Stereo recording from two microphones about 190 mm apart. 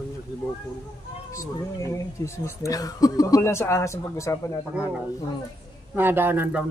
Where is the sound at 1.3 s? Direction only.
15° left (ahead or behind).